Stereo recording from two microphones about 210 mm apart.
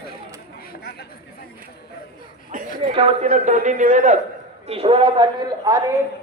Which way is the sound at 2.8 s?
25° right (ahead or behind).